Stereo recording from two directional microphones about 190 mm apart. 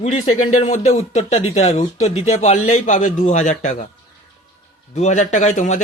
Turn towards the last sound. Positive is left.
turn(degrees=40)  # may be behind; listen again after turning